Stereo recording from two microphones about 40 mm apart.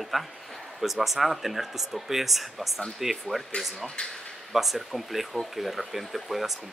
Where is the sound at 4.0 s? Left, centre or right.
Left.